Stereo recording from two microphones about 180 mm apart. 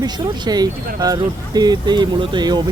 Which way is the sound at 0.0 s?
20° right (ahead or behind).